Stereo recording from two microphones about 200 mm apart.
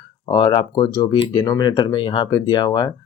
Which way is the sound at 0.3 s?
25° left (ahead or behind).